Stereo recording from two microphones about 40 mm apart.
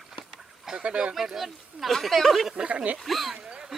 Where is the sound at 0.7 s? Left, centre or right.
Right.